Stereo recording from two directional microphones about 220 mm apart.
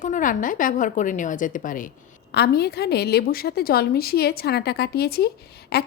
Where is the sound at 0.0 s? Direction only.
35° left (ahead or behind).